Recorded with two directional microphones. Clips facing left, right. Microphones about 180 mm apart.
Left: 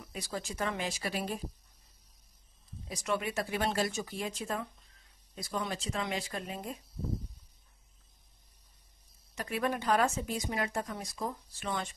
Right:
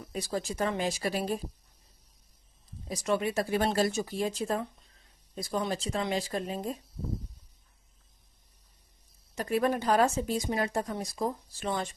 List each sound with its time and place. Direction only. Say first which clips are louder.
0.0 s speech: right 6 dB; 35° right (ahead or behind)
2.9 s speech: right 5 dB; 35° right (ahead or behind)
9.3 s speech: right 6 dB; 40° right (ahead or behind)